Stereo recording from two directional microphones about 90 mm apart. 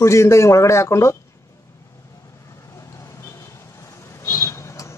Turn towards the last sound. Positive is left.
turn(degrees=30)  # may be behind; listen again after turning